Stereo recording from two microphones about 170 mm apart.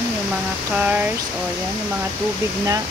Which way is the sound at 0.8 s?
10° right (ahead or behind).